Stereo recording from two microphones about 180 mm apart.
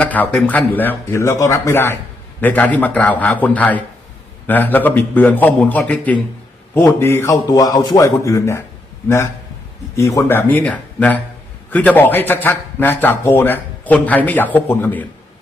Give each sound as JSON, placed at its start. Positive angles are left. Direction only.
{"t": 0.0, "sound": "a man's voice", "side_deg": 10}